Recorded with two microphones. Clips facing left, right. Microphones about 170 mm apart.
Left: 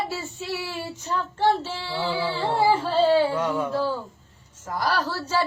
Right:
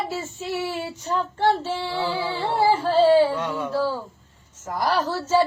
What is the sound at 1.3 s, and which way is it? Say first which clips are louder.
Speech: even; 15° right (ahead or behind).